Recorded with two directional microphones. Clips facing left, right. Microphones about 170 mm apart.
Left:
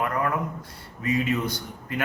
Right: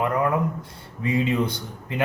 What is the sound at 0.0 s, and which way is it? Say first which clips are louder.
Speech: right 4 dB; 20° right (ahead or behind).